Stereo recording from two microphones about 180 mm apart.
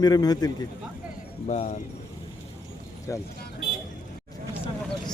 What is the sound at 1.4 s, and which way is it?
Speech, 40° left (ahead or behind).